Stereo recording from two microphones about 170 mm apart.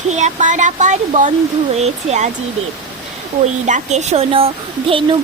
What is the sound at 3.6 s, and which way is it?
A woman's voice, 45° right (ahead or behind).